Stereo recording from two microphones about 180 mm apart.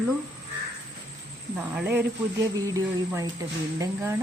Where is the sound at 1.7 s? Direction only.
10° right (ahead or behind).